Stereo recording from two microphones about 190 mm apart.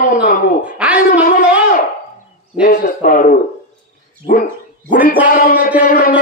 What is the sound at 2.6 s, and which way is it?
Speech, 55° left (ahead or behind).